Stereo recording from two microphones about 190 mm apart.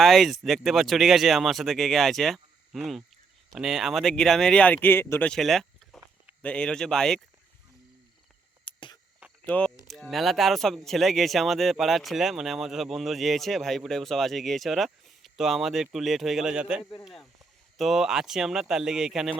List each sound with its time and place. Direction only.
0.0 s speech: centre (ahead or behind)
8.6 s a sound: 25° left (ahead or behind)
9.4 s speech: 5° left (ahead or behind)